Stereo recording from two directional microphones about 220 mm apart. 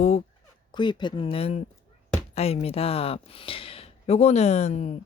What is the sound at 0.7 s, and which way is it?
Speech, 20° left (ahead or behind).